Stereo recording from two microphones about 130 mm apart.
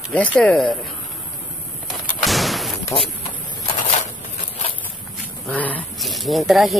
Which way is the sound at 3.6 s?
65° left (ahead or behind).